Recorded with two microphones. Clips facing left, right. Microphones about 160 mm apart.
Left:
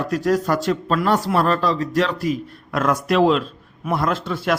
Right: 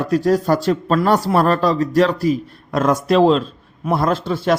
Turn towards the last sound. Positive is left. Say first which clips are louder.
# right 4 dB
turn(degrees=-30)  # may be behind; listen again after turning